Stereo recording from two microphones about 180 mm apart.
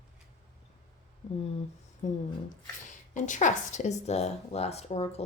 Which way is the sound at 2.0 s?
40° left (ahead or behind).